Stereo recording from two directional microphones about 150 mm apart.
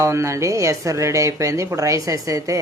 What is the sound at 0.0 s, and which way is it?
A woman's voice, 20° right (ahead or behind).